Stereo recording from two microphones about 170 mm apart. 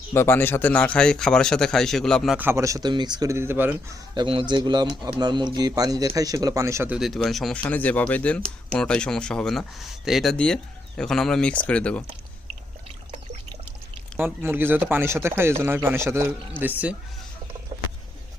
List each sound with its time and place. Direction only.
0.1 s speech: 15° left (ahead or behind)
2.4 s speech: 15° right (ahead or behind)
4.1 s speech: 30° right (ahead or behind); by 12.0 s 5° left (ahead or behind)
14.2 s speech: 10° right (ahead or behind)